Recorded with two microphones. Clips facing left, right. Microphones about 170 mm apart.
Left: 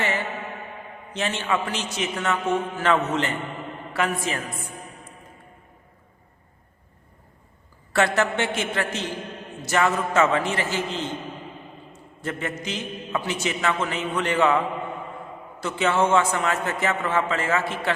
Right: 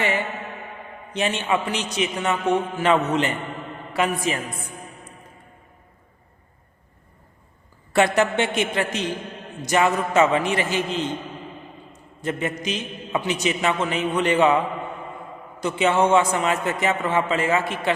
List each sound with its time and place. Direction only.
1.1 s a man's voice: 15° right (ahead or behind)
7.9 s a man's voice: 15° right (ahead or behind)
12.2 s a man's voice: 20° right (ahead or behind)
15.6 s a man's voice: 15° right (ahead or behind)